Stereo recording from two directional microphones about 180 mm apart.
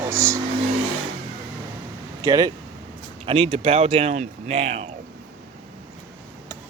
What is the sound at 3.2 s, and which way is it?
Speech, 30° right (ahead or behind).